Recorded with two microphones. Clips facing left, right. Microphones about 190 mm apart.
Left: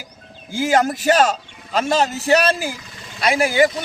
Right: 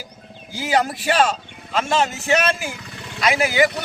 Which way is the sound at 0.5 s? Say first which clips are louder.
Left 3 dB; 50° left (ahead or behind).